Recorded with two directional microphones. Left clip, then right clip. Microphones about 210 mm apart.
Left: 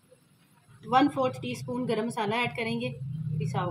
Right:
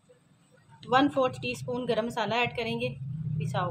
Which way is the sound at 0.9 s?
45° right (ahead or behind).